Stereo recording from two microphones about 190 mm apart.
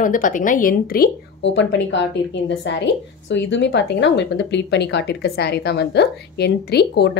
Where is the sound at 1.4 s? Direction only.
70° left (ahead or behind).